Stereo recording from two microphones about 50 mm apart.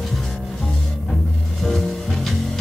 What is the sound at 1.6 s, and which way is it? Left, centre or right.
Music, centre.